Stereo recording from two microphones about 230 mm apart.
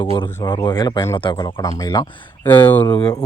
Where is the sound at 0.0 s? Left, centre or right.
Centre.